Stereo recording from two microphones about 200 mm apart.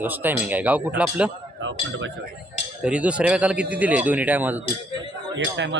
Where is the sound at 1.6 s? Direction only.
70° right (ahead or behind).